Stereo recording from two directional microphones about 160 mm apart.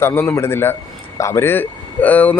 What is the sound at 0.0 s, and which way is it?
Speech, 15° left (ahead or behind).